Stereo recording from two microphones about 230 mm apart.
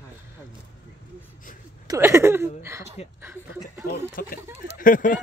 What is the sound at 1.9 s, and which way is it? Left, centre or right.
Speech, centre.